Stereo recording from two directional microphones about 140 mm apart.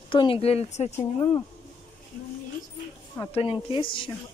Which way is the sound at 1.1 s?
40° left (ahead or behind).